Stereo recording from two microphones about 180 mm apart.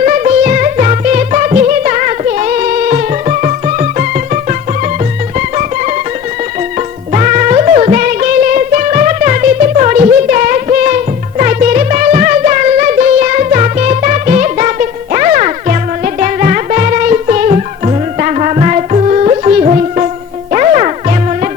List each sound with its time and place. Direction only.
0.0 s music: 40° right (ahead or behind)
7.1 s music: 40° right (ahead or behind)